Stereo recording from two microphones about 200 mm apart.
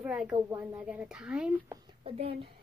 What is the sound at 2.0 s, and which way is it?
Speech, 30° right (ahead or behind).